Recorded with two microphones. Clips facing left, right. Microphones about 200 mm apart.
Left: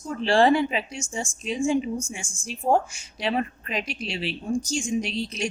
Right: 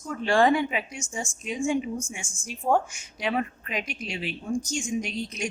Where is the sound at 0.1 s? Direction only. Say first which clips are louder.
Left 2 dB; 30° left (ahead or behind).